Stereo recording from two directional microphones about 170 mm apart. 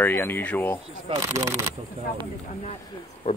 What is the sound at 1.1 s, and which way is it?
Speech, 15° right (ahead or behind).